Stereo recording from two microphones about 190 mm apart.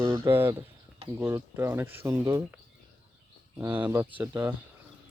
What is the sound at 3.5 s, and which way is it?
Speech, 10° right (ahead or behind).